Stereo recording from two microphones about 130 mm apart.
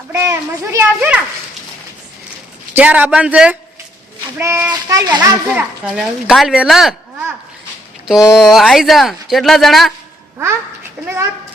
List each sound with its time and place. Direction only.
0.1 s a child's voice: 20° right (ahead or behind)
2.7 s a man's voice: 10° right (ahead or behind)
4.4 s a child's voice: 20° right (ahead or behind)
5.5 s speech: 5° right (ahead or behind)
8.4 s speech: centre (ahead or behind)
10.3 s a child's voice: 20° right (ahead or behind)